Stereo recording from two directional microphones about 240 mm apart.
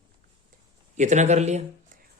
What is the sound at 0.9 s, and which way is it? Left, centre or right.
Speech, right.